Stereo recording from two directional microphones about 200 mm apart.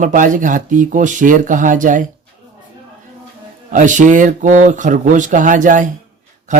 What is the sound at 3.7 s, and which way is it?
Speech, 40° right (ahead or behind).